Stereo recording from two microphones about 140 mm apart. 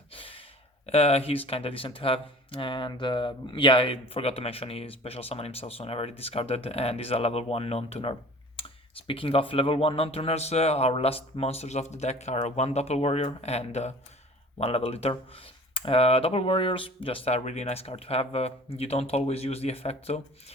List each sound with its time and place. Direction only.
0.1 s sigh: 40° left (ahead or behind)
0.9 s speech: 45° left (ahead or behind)